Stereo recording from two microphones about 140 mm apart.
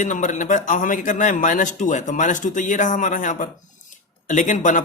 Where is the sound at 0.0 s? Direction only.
60° left (ahead or behind).